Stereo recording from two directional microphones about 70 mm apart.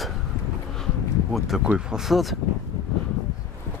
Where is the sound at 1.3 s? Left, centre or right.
Centre.